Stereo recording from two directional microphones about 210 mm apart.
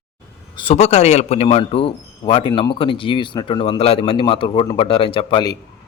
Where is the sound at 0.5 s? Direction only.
30° left (ahead or behind).